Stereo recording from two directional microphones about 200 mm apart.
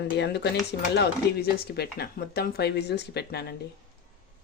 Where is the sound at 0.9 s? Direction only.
55° left (ahead or behind).